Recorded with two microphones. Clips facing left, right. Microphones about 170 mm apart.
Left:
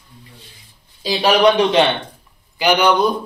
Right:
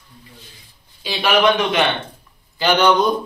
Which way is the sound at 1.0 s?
35° left (ahead or behind).